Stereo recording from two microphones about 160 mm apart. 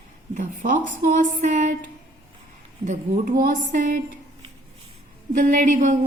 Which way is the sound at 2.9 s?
60° right (ahead or behind).